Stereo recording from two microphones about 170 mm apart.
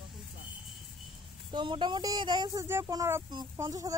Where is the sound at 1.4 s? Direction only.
30° right (ahead or behind).